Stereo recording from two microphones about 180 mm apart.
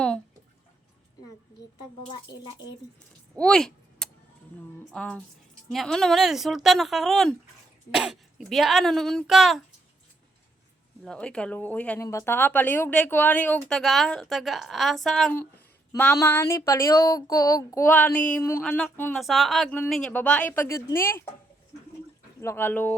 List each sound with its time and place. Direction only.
3.3 s a sound: 5° left (ahead or behind)
4.9 s speech: 5° left (ahead or behind)
11.0 s speech: 5° left (ahead or behind)
22.4 s speech: 15° left (ahead or behind)